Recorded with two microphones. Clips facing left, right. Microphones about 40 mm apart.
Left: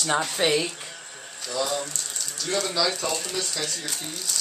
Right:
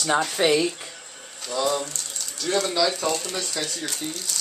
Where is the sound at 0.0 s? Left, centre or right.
Centre.